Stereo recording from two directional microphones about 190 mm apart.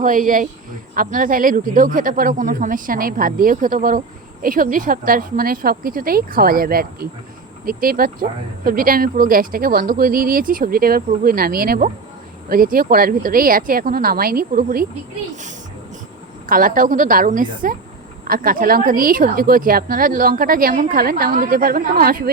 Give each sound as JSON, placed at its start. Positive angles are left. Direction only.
{"t": 0.0, "sound": "speech", "side_deg": -45}
{"t": 16.5, "sound": "speech", "side_deg": -45}